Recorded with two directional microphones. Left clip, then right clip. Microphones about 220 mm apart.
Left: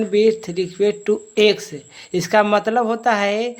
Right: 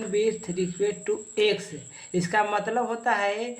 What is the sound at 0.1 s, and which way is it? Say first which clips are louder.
Speech: left 8 dB; 50° left (ahead or behind).